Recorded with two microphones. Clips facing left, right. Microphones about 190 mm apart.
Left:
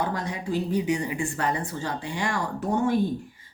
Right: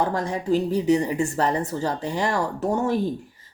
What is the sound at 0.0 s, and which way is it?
A woman's voice, 45° right (ahead or behind).